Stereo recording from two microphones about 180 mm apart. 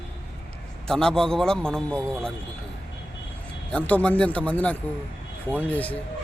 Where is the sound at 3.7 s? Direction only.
5° left (ahead or behind).